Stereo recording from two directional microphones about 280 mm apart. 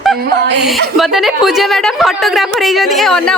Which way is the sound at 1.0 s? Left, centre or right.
Centre.